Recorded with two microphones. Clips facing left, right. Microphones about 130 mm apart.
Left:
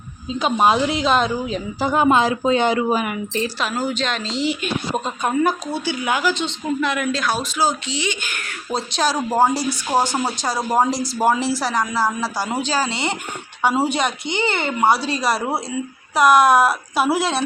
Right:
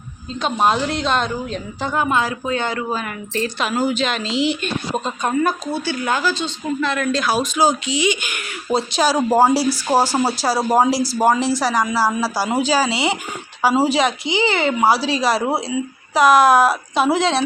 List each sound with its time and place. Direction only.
0.3 s speech: 5° left (ahead or behind)
1.9 s speech: 20° left (ahead or behind)
3.6 s speech: centre (ahead or behind)
4.9 s a woman's voice: 15° left (ahead or behind)
7.1 s speech: centre (ahead or behind)
7.3 s speech: 15° right (ahead or behind); by 17.4 s 5° left (ahead or behind)